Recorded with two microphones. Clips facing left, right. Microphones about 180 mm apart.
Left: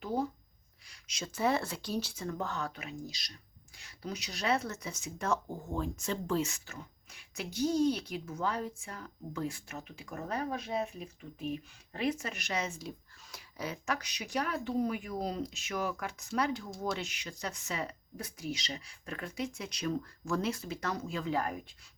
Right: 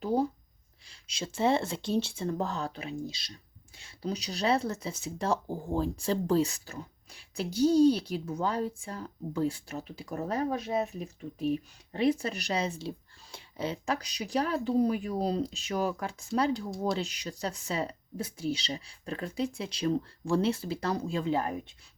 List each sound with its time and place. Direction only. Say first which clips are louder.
0.9 s speech: right 4 dB; 30° right (ahead or behind)